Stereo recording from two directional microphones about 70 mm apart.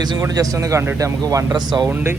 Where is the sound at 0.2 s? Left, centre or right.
Right.